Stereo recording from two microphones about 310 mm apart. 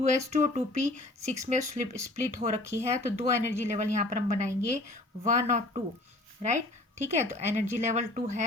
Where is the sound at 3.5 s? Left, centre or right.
Right.